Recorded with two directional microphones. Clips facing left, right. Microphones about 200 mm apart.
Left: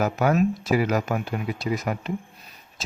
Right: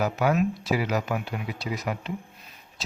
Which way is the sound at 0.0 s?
45° left (ahead or behind).